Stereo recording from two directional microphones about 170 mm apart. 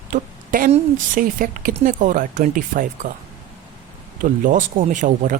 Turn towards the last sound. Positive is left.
turn(degrees=-50)  # may be behind; listen again after turning